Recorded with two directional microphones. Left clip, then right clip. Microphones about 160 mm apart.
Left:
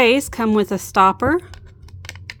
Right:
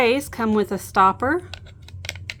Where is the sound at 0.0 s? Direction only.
40° left (ahead or behind).